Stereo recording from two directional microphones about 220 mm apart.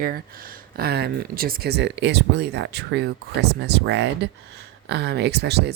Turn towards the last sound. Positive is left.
turn(degrees=-50)  # may be behind; listen again after turning